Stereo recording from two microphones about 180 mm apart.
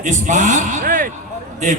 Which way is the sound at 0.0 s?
45° right (ahead or behind).